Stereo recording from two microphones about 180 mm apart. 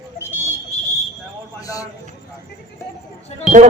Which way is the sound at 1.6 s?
20° left (ahead or behind).